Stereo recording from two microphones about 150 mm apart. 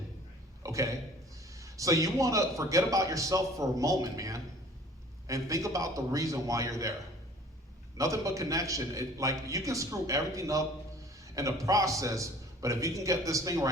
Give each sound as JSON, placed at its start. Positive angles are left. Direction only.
{"t": 0.6, "sound": "a sound", "side_deg": -20}
{"t": 1.5, "sound": "a man's voice", "side_deg": -20}
{"t": 7.9, "sound": "a man's voice", "side_deg": -20}